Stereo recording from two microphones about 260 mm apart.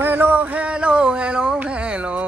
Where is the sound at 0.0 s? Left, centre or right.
Centre.